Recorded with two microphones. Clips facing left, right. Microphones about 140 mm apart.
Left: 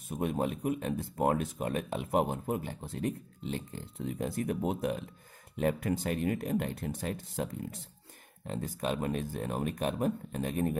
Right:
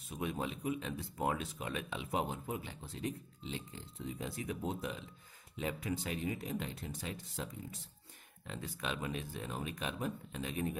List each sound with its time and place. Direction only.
0.1 s speech: 50° left (ahead or behind)
8.5 s speech: 45° left (ahead or behind)